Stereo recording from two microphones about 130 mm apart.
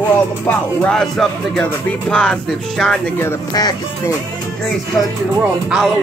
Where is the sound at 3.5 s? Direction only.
30° left (ahead or behind).